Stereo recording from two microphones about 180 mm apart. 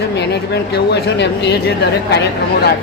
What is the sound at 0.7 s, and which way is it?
Speech, 70° left (ahead or behind).